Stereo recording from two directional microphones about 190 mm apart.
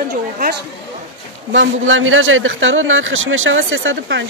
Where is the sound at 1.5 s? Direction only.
90° right.